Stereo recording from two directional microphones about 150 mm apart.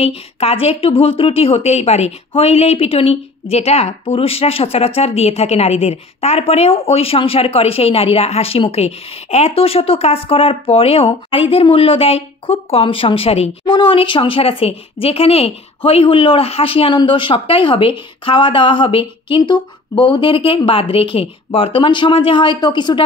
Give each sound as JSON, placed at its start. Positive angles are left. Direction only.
{"t": 0.0, "sound": "a woman's voice", "side_deg": 40}